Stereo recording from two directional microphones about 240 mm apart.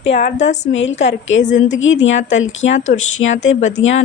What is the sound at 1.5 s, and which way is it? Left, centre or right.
Speech, left.